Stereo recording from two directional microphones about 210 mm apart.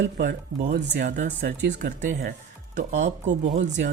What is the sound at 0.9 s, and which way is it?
Speech, 50° right (ahead or behind).